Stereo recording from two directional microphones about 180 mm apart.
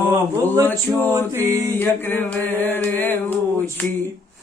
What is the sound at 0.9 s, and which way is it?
Music, 10° right (ahead or behind).